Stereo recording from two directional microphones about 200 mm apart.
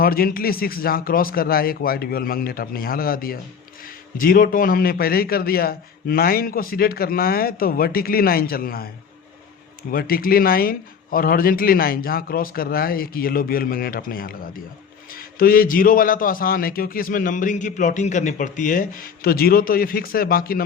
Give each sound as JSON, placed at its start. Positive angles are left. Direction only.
{"t": 0.0, "sound": "a man's voice", "side_deg": 45}
{"t": 9.9, "sound": "a man's voice", "side_deg": 45}